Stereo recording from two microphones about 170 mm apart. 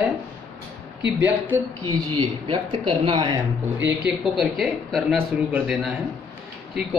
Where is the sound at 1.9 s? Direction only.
25° right (ahead or behind).